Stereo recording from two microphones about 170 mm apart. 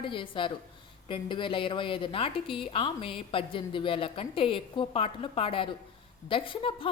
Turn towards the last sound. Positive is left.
turn(degrees=30)  # may be behind; listen again after turning